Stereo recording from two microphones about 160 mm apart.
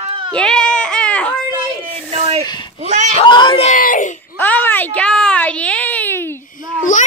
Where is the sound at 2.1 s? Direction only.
40° right (ahead or behind).